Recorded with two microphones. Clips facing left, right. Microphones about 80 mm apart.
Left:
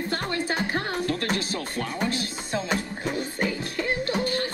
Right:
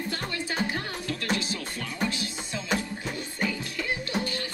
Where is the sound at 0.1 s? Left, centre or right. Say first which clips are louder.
Left 5 dB; left.